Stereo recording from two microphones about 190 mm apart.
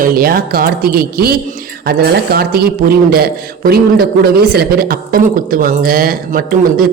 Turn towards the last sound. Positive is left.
turn(degrees=-50)  # may be behind; listen again after turning